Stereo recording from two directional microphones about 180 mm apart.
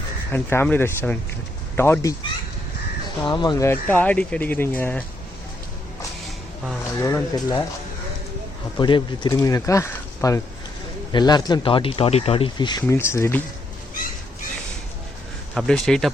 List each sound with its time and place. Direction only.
0.3 s speech: 10° left (ahead or behind)
3.2 s speech: 25° left (ahead or behind)
7.0 s speech: 20° left (ahead or behind)
8.8 s speech: 25° left (ahead or behind)
15.5 s speech: 5° left (ahead or behind)